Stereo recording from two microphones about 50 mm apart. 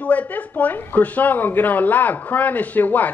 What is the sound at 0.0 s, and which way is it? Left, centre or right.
Speech, left.